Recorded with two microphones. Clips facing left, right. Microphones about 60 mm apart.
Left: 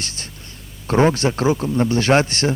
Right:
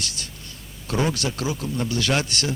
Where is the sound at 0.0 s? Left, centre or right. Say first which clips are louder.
Left 1 dB; left.